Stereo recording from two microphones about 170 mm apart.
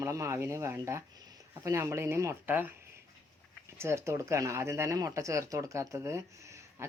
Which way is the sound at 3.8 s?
15° right (ahead or behind).